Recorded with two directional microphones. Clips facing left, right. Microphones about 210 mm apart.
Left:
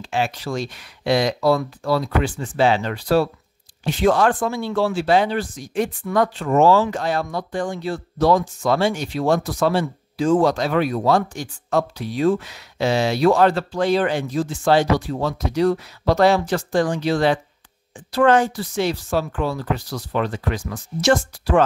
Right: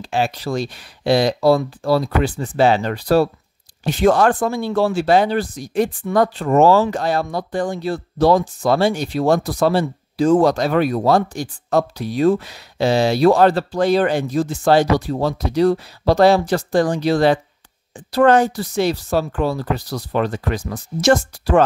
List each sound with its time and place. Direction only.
0.0 s speech: 35° right (ahead or behind)